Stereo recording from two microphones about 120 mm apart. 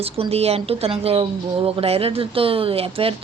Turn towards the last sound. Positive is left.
turn(degrees=-55)  # may be behind; listen again after turning